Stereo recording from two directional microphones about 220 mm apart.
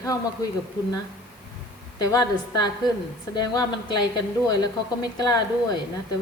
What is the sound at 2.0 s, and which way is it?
A woman's voice, 15° left (ahead or behind).